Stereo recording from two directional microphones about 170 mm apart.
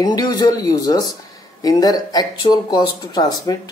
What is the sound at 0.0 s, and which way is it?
Speech, 25° left (ahead or behind).